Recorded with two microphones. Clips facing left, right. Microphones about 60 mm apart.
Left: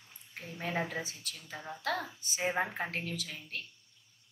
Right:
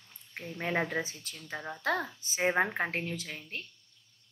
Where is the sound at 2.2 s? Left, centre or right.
Right.